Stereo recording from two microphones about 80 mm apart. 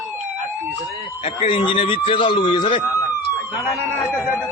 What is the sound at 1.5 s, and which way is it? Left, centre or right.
Speech, left.